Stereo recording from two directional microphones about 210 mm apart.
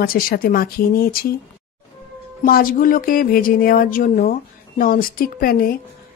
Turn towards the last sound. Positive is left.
turn(degrees=45)  # may be behind; listen again after turning